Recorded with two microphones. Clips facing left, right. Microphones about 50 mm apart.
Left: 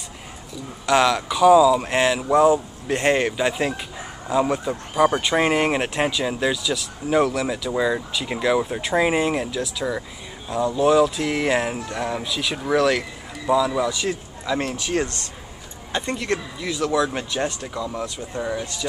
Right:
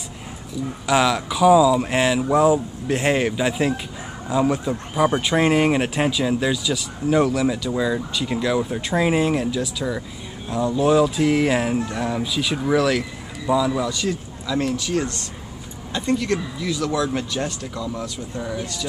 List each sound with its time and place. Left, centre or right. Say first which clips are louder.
0.8 s speech: left 1 dB; centre
14.0 s speech: even; left
15.9 s speech: right 3 dB; left